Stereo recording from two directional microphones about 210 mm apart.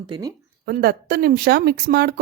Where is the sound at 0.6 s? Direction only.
45° right (ahead or behind).